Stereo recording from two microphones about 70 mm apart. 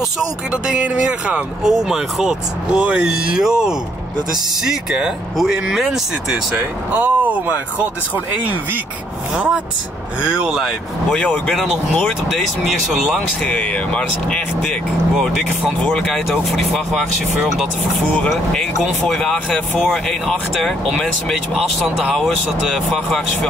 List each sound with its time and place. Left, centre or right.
0.5 s speech: centre
1.6 s speech: centre
2.8 s speech: centre
6.5 s speech: right
9.3 s speech: centre
11.1 s speech: centre
13.1 s speech: centre
15.8 s speech: centre
18.5 s speech: centre